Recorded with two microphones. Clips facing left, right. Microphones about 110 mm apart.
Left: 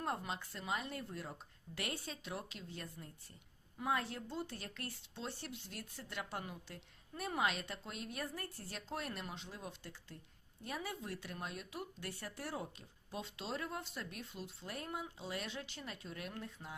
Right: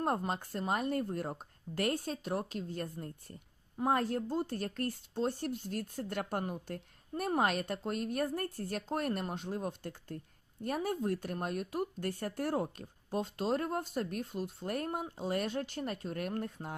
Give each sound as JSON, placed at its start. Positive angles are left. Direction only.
{"t": 0.0, "sound": "speech", "side_deg": -45}